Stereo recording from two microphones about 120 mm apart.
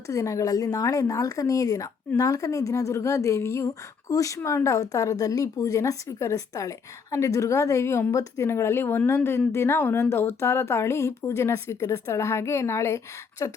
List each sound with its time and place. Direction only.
0.1 s speech: 25° left (ahead or behind)